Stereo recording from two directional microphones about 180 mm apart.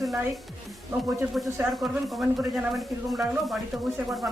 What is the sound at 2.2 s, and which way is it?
Speech, centre (ahead or behind).